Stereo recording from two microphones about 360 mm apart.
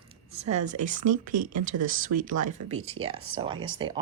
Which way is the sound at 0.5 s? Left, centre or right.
Centre.